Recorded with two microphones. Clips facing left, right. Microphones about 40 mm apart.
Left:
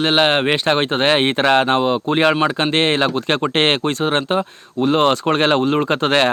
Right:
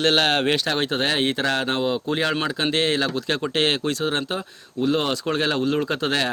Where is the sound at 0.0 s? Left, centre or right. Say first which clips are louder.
Left 4 dB; left.